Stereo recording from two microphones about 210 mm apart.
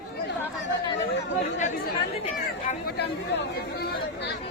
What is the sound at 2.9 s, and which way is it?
Chatter, 50° left (ahead or behind).